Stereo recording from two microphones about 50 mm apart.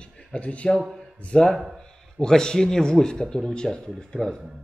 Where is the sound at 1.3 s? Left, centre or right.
Centre.